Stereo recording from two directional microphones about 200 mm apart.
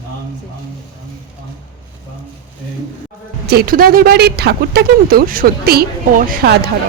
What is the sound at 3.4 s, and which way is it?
Speech, 50° right (ahead or behind).